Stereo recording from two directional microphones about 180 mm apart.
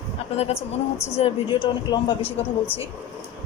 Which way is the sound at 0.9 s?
15° left (ahead or behind).